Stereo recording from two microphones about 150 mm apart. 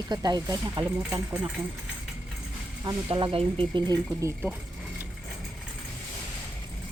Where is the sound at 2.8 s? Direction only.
20° right (ahead or behind).